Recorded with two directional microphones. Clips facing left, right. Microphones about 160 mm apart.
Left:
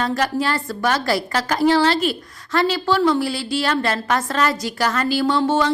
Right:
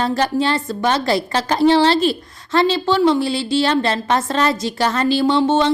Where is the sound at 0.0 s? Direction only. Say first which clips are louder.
Right 3 dB; 30° right (ahead or behind).